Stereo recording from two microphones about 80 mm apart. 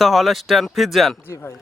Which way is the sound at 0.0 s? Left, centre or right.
Centre.